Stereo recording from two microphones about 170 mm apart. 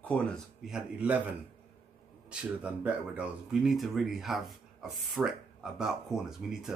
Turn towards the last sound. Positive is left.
turn(degrees=0)  # may be behind; listen again after turning